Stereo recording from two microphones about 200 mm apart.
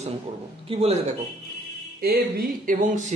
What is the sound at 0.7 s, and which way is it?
Speech, 30° right (ahead or behind).